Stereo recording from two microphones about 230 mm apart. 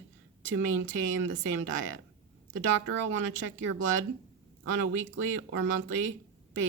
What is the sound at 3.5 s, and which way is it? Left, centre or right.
Speech, right.